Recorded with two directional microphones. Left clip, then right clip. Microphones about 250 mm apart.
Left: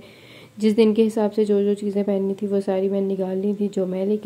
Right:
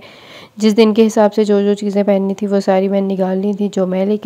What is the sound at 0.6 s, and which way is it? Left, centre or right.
Speech, right.